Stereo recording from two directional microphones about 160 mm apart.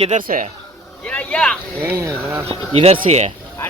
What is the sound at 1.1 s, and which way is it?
Vehicle, 10° left (ahead or behind).